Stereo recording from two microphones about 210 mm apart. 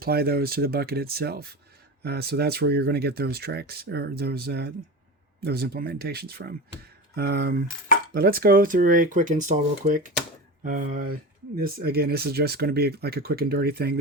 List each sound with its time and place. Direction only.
0.0 s speech: 45° right (ahead or behind)